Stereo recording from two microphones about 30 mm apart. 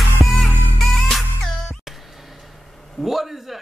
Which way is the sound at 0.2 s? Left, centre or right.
Right.